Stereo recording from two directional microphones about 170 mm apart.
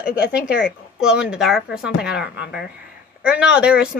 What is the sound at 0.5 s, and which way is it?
Speech, 5° right (ahead or behind).